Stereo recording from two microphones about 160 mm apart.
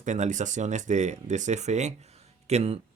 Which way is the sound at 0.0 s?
50° right (ahead or behind).